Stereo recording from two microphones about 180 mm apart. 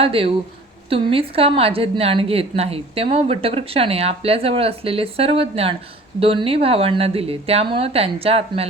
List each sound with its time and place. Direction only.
0.0 s a woman's voice: 30° right (ahead or behind)